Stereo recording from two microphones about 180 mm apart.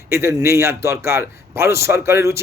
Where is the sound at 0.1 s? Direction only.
15° right (ahead or behind).